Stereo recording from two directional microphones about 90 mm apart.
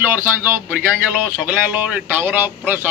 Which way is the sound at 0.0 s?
20° right (ahead or behind).